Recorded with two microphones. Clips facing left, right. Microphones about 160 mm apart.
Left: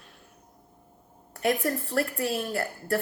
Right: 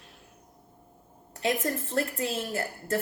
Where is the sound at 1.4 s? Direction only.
25° right (ahead or behind).